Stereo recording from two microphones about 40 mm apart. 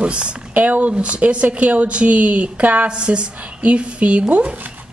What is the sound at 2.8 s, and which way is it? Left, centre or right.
Speech, right.